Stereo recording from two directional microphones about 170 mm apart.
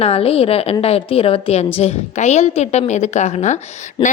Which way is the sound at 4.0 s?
30° left (ahead or behind).